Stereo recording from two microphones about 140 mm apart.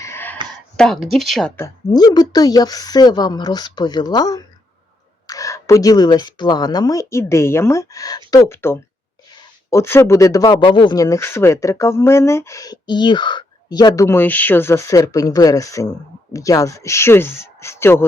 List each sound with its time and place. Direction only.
0.0 s a sound: 15° left (ahead or behind)
0.8 s speech: 5° left (ahead or behind)
1.5 s speech: 25° left (ahead or behind)
10.6 s speech: 35° left (ahead or behind); by 18.0 s 15° left (ahead or behind)